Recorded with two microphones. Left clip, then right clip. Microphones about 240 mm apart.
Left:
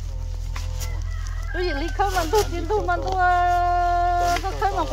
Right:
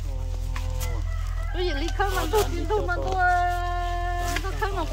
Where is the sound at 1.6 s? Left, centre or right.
Left.